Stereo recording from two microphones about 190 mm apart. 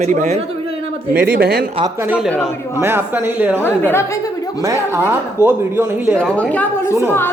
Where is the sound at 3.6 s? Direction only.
10° left (ahead or behind).